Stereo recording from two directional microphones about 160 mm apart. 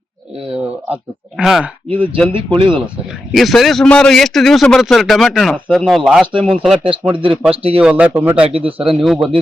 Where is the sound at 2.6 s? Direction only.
30° right (ahead or behind).